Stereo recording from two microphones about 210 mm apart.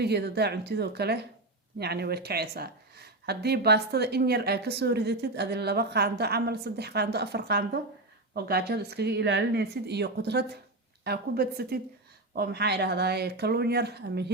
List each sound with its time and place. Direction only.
0.0 s speech: 50° right (ahead or behind)